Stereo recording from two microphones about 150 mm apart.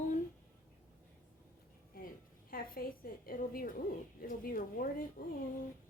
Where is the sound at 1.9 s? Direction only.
75° left (ahead or behind).